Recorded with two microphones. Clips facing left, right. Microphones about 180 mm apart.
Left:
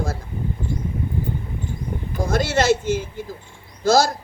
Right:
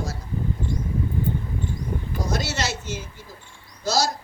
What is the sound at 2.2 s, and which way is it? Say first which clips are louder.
A man's voice: left 10 dB; 50° left (ahead or behind).